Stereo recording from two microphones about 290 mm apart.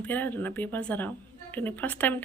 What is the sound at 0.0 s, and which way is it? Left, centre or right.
Speech, centre.